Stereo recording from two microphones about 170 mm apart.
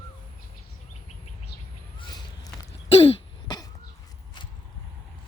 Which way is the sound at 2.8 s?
35° left (ahead or behind).